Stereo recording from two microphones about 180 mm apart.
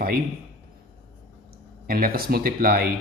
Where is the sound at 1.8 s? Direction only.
55° right (ahead or behind).